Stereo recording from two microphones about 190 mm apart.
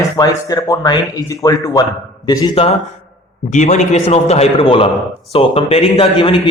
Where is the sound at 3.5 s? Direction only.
35° left (ahead or behind).